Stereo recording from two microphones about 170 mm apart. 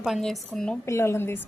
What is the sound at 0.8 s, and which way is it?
Speech, 15° left (ahead or behind).